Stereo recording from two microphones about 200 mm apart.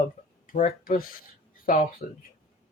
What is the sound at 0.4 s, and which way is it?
Speech, 40° left (ahead or behind).